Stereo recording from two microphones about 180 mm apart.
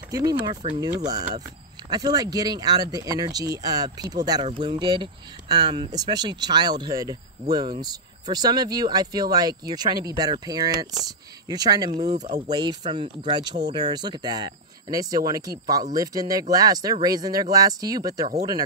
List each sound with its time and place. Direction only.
0.1 s speech: 20° right (ahead or behind)
11.9 s speech: 40° right (ahead or behind)
12.4 s speech: 25° right (ahead or behind)